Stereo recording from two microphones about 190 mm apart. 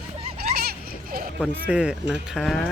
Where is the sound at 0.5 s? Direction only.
55° right (ahead or behind).